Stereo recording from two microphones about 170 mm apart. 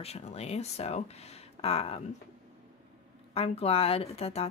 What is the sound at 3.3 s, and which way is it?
Speech, 35° left (ahead or behind).